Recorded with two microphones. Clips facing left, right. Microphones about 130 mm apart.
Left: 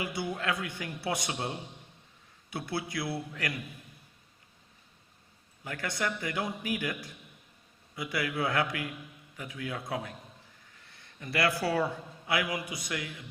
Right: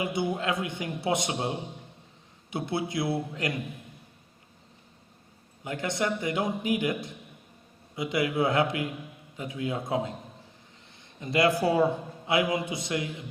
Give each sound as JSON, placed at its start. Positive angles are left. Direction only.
{"t": 0.0, "sound": "a man's voice", "side_deg": -20}
{"t": 5.6, "sound": "a man's voice", "side_deg": -20}
{"t": 7.9, "sound": "a man's voice", "side_deg": -20}